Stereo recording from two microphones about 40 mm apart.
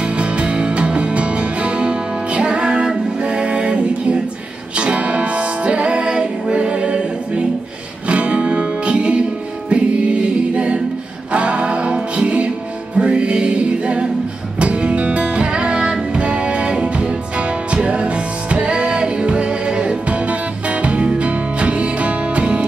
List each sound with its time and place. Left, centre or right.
0.0 s music: right